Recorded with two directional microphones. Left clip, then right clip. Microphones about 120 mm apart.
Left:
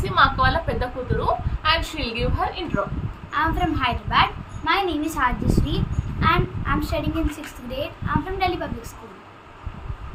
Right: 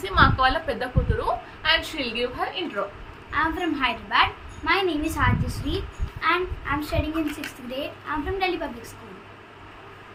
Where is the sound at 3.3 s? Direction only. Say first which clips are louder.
Left 2 dB; 20° left (ahead or behind).